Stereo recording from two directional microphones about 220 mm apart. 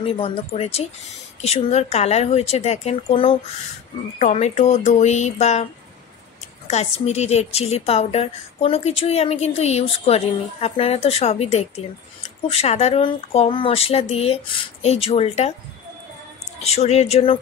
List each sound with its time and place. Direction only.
0.0 s a woman's voice: 25° left (ahead or behind)
6.7 s a woman's voice: 30° left (ahead or behind)
16.5 s a woman's voice: 30° left (ahead or behind)